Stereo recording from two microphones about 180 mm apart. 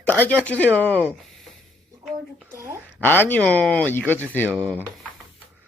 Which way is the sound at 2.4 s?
15° right (ahead or behind).